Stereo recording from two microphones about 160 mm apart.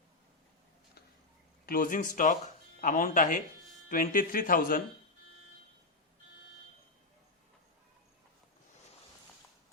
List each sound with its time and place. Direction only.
1.6 s speech: 60° left (ahead or behind)